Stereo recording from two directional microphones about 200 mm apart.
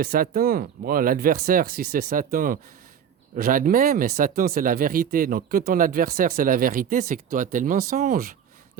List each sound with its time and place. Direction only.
0.0 s speech: 45° right (ahead or behind)